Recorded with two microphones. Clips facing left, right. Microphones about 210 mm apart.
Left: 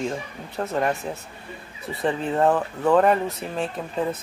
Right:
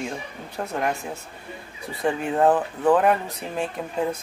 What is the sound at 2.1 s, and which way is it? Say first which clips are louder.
Speech: right 1 dB; 15° right (ahead or behind).